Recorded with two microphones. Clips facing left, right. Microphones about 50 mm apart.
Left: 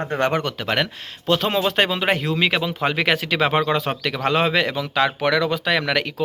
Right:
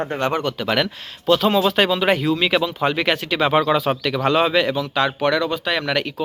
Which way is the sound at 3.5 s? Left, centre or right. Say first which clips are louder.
Right 3 dB; left.